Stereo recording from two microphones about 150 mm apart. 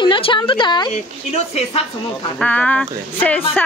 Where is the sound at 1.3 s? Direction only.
45° left (ahead or behind).